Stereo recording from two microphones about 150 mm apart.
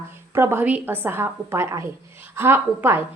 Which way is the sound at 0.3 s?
15° right (ahead or behind).